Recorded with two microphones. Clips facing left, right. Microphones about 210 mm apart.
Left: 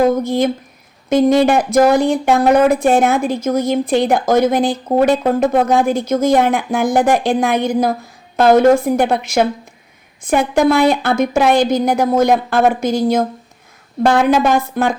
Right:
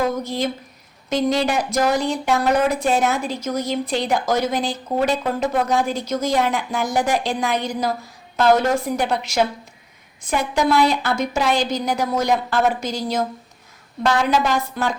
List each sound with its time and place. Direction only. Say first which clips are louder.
0.0 s speech: left 8 dB; 50° left (ahead or behind)